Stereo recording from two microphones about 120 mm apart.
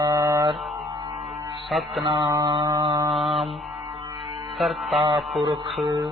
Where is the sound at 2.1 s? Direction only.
35° right (ahead or behind).